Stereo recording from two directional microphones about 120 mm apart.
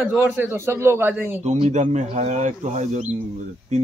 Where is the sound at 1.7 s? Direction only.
80° right.